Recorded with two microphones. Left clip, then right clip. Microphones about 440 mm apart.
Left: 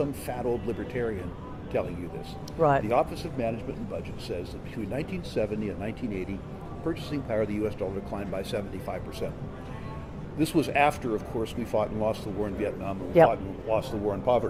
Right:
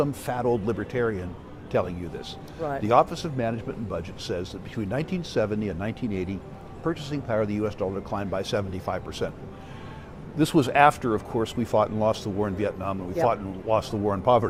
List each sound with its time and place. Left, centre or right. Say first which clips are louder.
0.0 s speech: right 4 dB; right
2.6 s speech: left 8 dB; left
2.8 s speech: right 5 dB; right
4.9 s speech: right 4 dB; right
6.8 s speech: right 3 dB; right
10.3 s speech: right 4 dB; right